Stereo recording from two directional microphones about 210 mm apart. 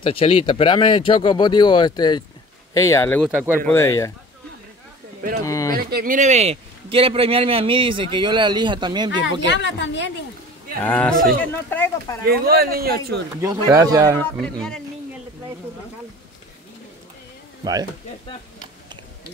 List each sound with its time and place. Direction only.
0.0 s speech: 25° left (ahead or behind)
3.3 s speech: 5° right (ahead or behind)
3.6 s speech: 10° left (ahead or behind)
5.4 s speech: 15° left (ahead or behind)
5.8 s a man's voice: 45° right (ahead or behind); by 9.4 s 20° right (ahead or behind)
9.6 s speech: 60° left (ahead or behind)
10.9 s speech: 5° left (ahead or behind)
12.3 s speech: 45° right (ahead or behind)
13.7 s speech: 15° right (ahead or behind)
14.2 s speech: 5° left (ahead or behind)